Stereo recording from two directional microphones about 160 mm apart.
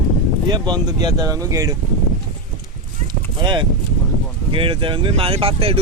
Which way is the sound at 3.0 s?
30° right (ahead or behind).